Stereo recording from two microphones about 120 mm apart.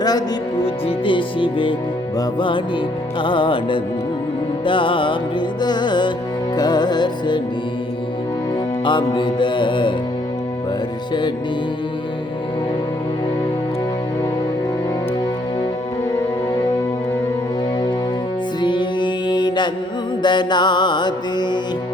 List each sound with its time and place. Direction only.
0.6 s music: 50° left (ahead or behind)
8.8 s music: 40° left (ahead or behind)
18.6 s music: 40° left (ahead or behind)